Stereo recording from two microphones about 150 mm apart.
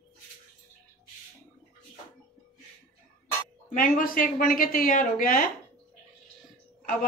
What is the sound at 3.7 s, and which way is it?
A woman's voice, 65° left (ahead or behind).